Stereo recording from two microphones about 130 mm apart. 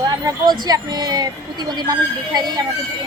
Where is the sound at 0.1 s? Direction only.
30° right (ahead or behind).